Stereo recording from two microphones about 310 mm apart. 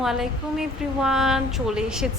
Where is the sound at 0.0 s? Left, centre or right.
Centre.